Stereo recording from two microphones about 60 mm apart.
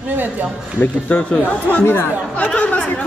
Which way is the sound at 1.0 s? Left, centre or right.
Left.